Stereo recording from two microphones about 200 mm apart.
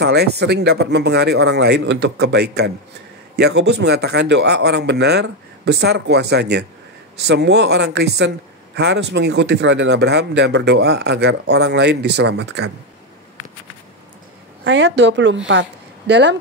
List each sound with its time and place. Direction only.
0.0 s speech: 55° right (ahead or behind)
14.6 s speech: 60° right (ahead or behind)